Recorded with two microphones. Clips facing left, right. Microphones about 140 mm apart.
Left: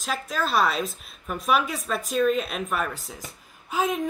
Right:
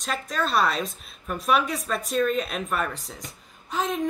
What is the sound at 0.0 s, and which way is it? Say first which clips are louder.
A woman's voice: even; centre (ahead or behind).